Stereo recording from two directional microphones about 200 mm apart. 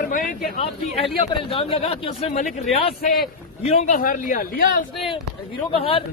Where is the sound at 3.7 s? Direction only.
35° left (ahead or behind).